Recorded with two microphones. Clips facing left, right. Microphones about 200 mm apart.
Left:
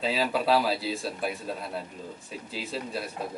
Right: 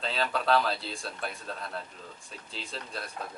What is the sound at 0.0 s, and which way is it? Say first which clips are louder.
Speech: left 4 dB; 5° left (ahead or behind).